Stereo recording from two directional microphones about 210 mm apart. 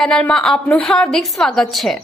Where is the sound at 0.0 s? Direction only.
5° left (ahead or behind).